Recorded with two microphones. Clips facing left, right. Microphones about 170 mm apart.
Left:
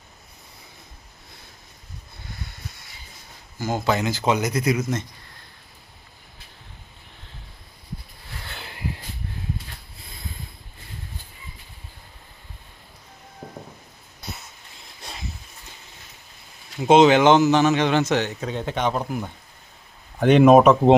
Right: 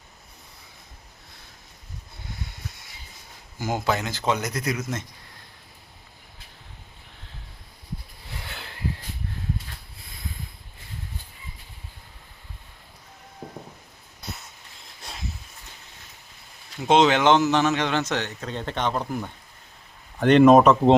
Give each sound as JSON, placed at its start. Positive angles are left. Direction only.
{"t": 3.8, "sound": "a man's voice", "side_deg": 0}
{"t": 15.0, "sound": "a sound", "side_deg": 0}
{"t": 16.8, "sound": "a man's voice", "side_deg": 5}